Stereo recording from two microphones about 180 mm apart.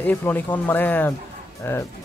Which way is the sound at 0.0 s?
10° left (ahead or behind).